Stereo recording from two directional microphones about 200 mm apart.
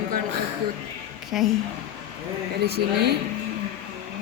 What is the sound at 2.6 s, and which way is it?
Speech, 55° right (ahead or behind).